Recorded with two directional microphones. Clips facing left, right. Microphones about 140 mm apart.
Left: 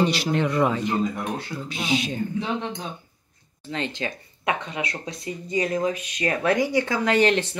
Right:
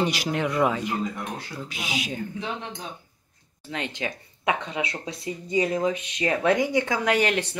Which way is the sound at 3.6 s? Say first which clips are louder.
Left 2 dB; 10° right (ahead or behind).